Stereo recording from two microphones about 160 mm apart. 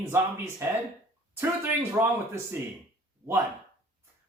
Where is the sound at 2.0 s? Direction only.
15° right (ahead or behind).